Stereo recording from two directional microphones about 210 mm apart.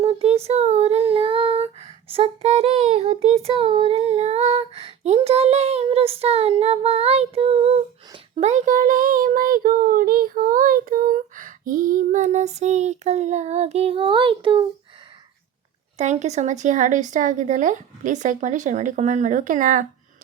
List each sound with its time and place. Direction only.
0.0 s a sound: 30° right (ahead or behind)
0.4 s child singing: 30° right (ahead or behind)
16.0 s child singing: 30° right (ahead or behind)